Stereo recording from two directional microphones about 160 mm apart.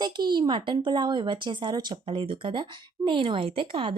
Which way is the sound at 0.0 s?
25° right (ahead or behind).